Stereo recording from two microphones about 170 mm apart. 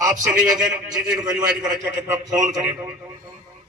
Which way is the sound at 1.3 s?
20° right (ahead or behind).